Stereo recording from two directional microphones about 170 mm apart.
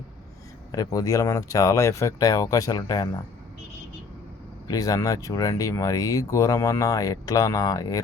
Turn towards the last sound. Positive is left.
turn(degrees=20)  # may be behind; listen again after turning